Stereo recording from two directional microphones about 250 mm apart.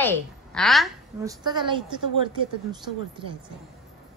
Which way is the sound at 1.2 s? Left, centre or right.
Centre.